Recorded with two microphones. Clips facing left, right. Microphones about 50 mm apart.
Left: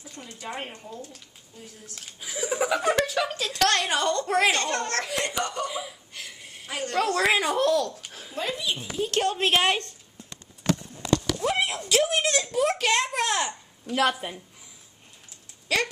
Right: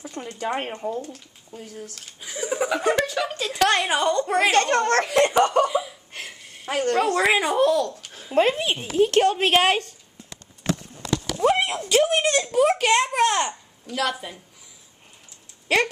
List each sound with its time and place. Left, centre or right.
0.0 s speech: right
2.1 s a child's voice: centre
4.5 s speech: right
5.7 s laughter: centre
6.4 s a sound: centre
6.7 s speech: right
7.0 s a child's voice: centre
8.0 s a sound: centre
8.4 s speech: right
9.2 s a woman's voice: right
9.5 s a child's voice: centre
11.6 s a child's voice: centre
13.9 s speech: left
15.7 s speech: right